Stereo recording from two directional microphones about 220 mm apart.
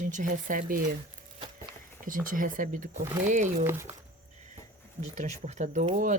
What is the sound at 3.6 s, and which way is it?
Speech, 10° right (ahead or behind).